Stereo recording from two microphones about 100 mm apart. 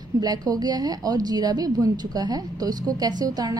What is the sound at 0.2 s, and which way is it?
A woman's voice, 45° right (ahead or behind).